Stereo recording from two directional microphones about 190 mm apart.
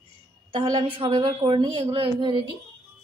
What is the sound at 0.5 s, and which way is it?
A woman's voice, 25° right (ahead or behind).